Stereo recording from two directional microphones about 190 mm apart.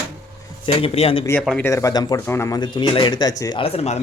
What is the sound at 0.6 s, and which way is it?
Speech, 30° left (ahead or behind).